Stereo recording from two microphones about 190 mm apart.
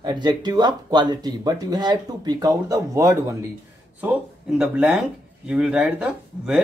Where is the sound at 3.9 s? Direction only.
5° right (ahead or behind).